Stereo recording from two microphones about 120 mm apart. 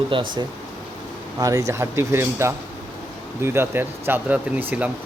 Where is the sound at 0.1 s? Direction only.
45° right (ahead or behind).